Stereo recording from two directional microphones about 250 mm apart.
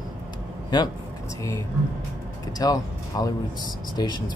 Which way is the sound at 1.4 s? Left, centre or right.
Centre.